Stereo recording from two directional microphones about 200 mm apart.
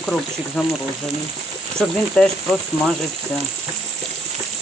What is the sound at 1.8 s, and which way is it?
Speech, 5° left (ahead or behind).